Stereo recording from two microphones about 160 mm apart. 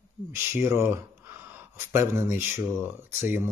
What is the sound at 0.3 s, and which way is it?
Speech, 15° right (ahead or behind).